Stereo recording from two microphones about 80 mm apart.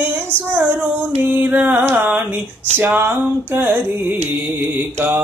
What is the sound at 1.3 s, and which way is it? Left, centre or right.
Music, right.